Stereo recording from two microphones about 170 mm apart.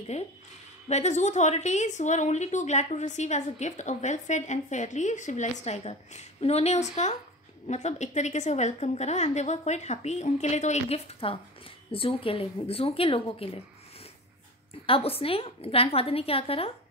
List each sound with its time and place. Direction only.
0.1 s a woman's voice: 45° left (ahead or behind)
14.9 s a woman's voice: 35° left (ahead or behind)